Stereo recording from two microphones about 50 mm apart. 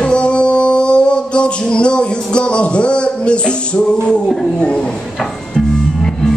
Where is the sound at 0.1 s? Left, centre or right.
Left.